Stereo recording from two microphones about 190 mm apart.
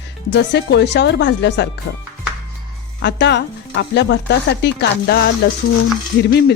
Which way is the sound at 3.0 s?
65° left (ahead or behind).